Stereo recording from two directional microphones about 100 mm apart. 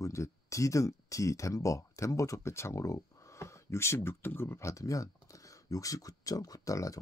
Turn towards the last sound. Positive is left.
turn(degrees=35)  # may be behind; listen again after turning